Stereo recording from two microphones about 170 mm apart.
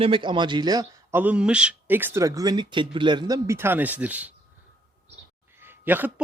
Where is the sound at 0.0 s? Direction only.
30° right (ahead or behind).